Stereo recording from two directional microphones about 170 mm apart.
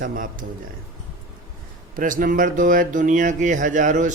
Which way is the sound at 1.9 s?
50° right (ahead or behind).